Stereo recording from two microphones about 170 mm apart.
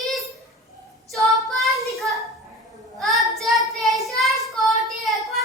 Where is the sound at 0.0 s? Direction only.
Centre (ahead or behind).